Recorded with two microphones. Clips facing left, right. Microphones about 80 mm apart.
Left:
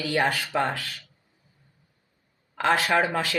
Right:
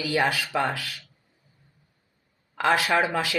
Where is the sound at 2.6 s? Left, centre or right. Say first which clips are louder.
Even; left.